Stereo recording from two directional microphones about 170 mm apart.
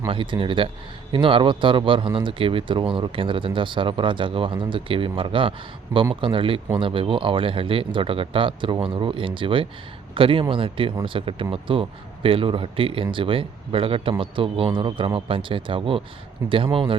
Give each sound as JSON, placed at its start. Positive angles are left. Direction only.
{"t": 0.1, "sound": "speech", "side_deg": -30}
{"t": 16.4, "sound": "speech", "side_deg": -15}